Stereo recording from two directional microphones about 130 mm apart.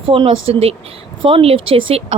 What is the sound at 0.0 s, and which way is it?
Speech, 45° right (ahead or behind).